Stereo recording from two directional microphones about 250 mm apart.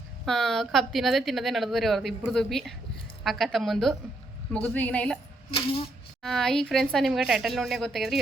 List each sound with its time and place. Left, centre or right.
0.3 s speech: centre
5.5 s speech: left
6.2 s speech: centre